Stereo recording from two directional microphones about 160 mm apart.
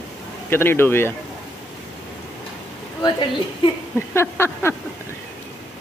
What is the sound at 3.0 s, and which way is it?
Speech, 30° left (ahead or behind).